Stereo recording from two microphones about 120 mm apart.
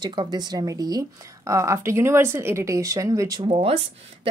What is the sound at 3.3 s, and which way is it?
Speech, 45° right (ahead or behind).